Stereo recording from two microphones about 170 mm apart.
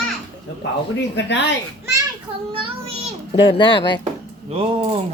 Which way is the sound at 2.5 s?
30° right (ahead or behind).